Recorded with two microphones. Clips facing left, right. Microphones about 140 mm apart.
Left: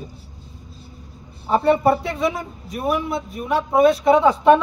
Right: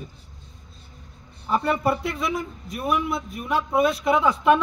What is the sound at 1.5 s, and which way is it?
A man's voice, 35° left (ahead or behind).